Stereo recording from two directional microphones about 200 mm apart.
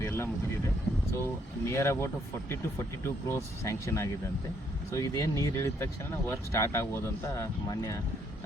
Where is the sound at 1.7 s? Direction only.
15° left (ahead or behind).